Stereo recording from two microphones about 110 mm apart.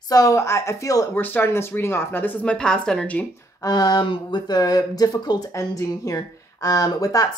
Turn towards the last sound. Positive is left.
turn(degrees=35)  # may be behind; listen again after turning